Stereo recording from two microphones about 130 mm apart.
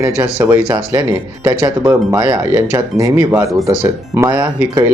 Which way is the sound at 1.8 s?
20° right (ahead or behind).